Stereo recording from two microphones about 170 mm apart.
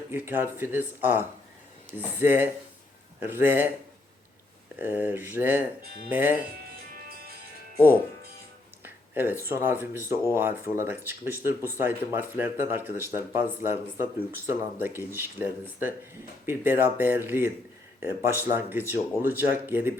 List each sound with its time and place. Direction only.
0.1 s speech: 10° right (ahead or behind)
4.8 s speech: 10° right (ahead or behind)
8.8 s music: 10° right (ahead or behind)
9.4 s speech: 15° right (ahead or behind)